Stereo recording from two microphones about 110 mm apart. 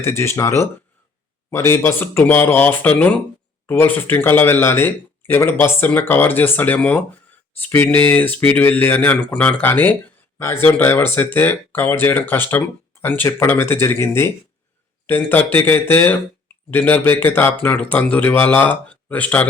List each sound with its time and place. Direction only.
0.0 s speech: 25° left (ahead or behind)